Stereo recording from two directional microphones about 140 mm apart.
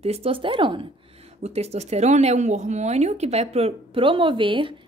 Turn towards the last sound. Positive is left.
turn(degrees=-35)  # may be behind; listen again after turning